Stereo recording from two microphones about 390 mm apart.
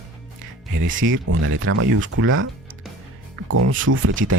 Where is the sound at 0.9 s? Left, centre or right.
Right.